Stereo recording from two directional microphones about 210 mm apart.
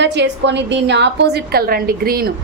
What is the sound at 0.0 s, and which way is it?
A woman's voice, 55° right (ahead or behind).